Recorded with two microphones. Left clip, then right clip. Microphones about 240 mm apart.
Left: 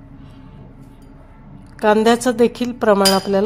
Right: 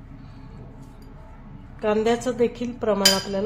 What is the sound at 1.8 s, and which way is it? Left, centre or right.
A woman's voice, left.